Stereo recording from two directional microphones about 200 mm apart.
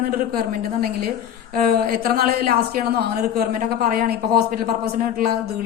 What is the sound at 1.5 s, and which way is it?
A woman's voice, 50° right (ahead or behind).